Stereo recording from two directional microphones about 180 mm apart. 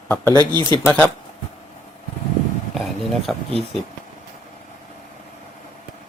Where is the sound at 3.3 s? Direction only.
Centre (ahead or behind).